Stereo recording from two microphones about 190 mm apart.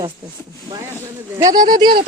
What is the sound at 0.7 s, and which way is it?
Speech, 15° right (ahead or behind).